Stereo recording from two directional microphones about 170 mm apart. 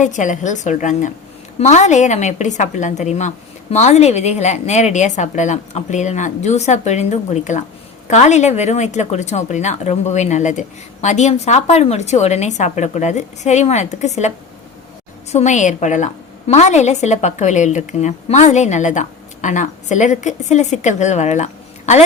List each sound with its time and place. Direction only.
0.0 s a woman's voice: 45° left (ahead or behind)